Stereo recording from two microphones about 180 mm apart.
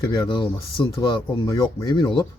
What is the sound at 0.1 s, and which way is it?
Speech, 25° left (ahead or behind).